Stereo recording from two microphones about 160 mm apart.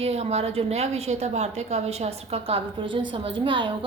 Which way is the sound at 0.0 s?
40° right (ahead or behind).